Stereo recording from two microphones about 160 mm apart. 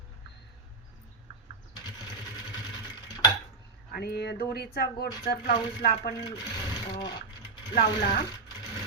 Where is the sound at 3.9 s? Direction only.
90° left.